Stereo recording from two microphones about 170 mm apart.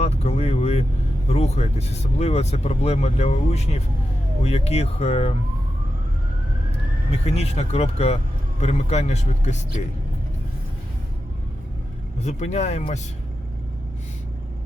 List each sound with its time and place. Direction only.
0.0 s vehicle: 40° left (ahead or behind)
1.3 s speech: 40° left (ahead or behind)
6.7 s speech: 35° left (ahead or behind)
12.2 s speech: 40° left (ahead or behind)